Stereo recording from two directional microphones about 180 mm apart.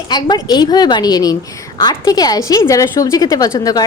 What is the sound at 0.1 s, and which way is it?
A woman's voice, 25° left (ahead or behind).